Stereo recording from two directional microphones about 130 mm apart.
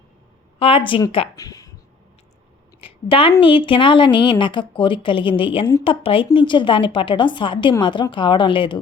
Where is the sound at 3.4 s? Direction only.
40° left (ahead or behind).